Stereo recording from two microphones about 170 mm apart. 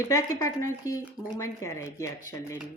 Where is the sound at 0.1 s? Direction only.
15° left (ahead or behind).